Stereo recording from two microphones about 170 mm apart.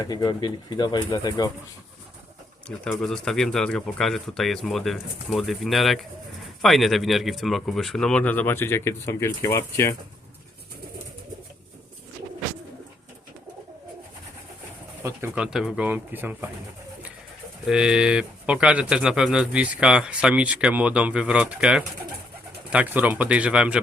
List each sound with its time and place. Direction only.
0.0 s speech: 25° left (ahead or behind)
2.6 s speech: 5° left (ahead or behind)
15.4 s speech: 5° right (ahead or behind)
17.7 s speech: 5° right (ahead or behind)